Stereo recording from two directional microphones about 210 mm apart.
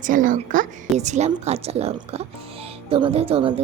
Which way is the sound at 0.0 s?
40° right (ahead or behind).